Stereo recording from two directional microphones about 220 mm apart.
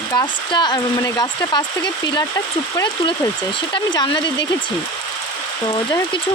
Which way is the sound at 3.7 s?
20° left (ahead or behind).